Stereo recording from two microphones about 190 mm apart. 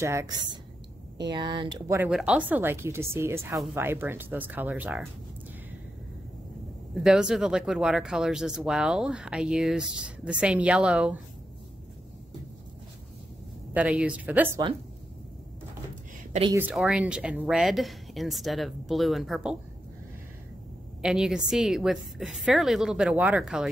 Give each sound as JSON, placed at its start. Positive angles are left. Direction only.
{"t": 0.0, "sound": "speech", "side_deg": -15}
{"t": 2.0, "sound": "speech", "side_deg": -5}
{"t": 7.0, "sound": "speech", "side_deg": -5}
{"t": 13.7, "sound": "speech", "side_deg": -5}
{"t": 16.5, "sound": "speech", "side_deg": -5}
{"t": 21.0, "sound": "speech", "side_deg": -5}